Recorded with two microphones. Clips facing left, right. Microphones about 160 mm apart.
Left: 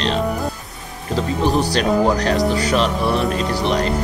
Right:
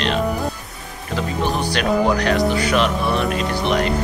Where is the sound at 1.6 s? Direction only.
35° left (ahead or behind).